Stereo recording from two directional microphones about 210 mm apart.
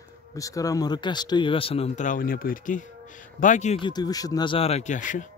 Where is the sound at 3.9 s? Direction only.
20° left (ahead or behind); by 5.3 s 35° left (ahead or behind).